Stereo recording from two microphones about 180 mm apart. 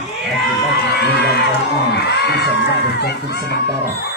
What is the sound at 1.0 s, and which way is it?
Speech, 65° left (ahead or behind).